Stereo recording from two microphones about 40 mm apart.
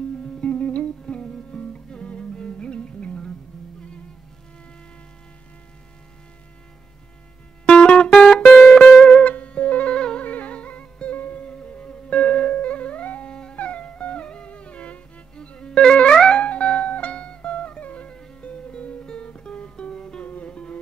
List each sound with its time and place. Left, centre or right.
0.2 s music: left
1.0 s music: left
7.6 s music: left
8.1 s music: centre; by 9.9 s left
9.9 s music: left
10.2 s music: left
11.4 s music: left
13.3 s music: left
20.2 s music: left